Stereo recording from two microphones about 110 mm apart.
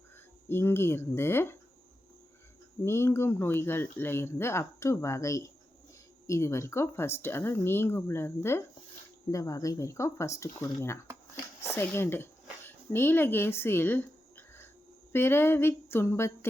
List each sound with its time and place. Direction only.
0.4 s speech: 20° left (ahead or behind)
2.8 s speech: 25° left (ahead or behind)
11.6 s a sound: 20° left (ahead or behind)
15.1 s speech: 20° left (ahead or behind)